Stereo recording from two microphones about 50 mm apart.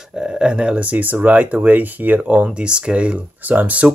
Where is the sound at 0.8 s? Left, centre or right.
Right.